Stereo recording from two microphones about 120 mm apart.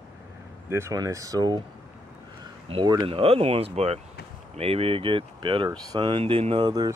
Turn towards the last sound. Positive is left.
turn(degrees=-35)  # may be behind; listen again after turning